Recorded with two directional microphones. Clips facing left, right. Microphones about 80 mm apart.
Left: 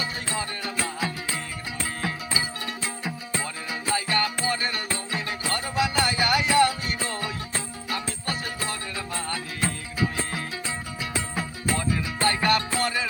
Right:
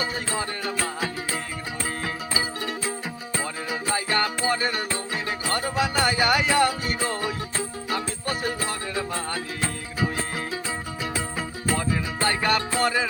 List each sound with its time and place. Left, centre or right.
0.0 s music: right
3.7 s music: right
11.8 s music: right